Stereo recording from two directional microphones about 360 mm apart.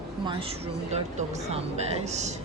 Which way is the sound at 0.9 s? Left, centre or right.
Centre.